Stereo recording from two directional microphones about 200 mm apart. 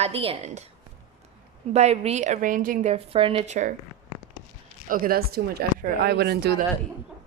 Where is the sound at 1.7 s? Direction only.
30° right (ahead or behind).